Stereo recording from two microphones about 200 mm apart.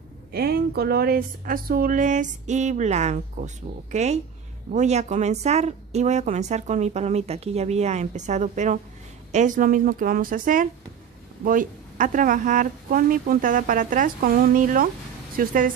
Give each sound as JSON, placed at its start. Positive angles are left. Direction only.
{"t": 0.3, "sound": "a woman's voice", "side_deg": -50}